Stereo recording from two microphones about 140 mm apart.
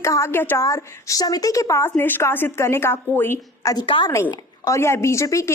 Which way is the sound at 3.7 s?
35° left (ahead or behind).